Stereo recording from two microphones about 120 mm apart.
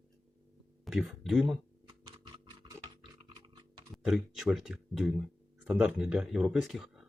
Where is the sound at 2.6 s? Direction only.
45° right (ahead or behind).